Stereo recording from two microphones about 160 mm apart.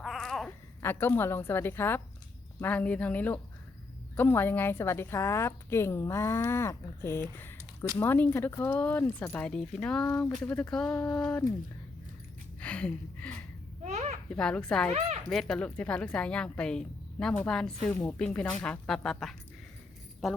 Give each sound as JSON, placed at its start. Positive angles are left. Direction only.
{"t": 0.0, "sound": "a sound", "side_deg": 0}
{"t": 0.8, "sound": "a woman's voice", "side_deg": 15}
{"t": 12.5, "sound": "speech", "side_deg": 10}
{"t": 13.8, "sound": "babbling", "side_deg": -45}
{"t": 14.3, "sound": "a woman's voice", "side_deg": 5}